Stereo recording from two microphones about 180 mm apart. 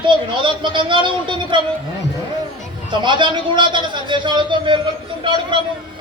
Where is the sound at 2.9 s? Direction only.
25° right (ahead or behind).